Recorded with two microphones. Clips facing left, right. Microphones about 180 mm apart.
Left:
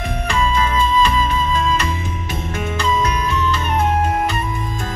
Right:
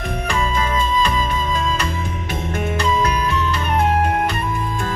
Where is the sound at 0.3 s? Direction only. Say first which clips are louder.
Left 3 dB; 45° right (ahead or behind).